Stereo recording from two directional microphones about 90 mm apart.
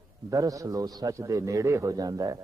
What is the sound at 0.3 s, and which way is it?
Speech, 40° right (ahead or behind).